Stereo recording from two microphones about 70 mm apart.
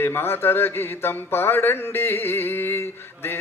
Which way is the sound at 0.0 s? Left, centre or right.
Left.